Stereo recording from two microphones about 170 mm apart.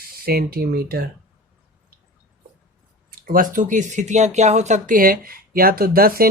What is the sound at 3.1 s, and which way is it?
Speech, 55° right (ahead or behind).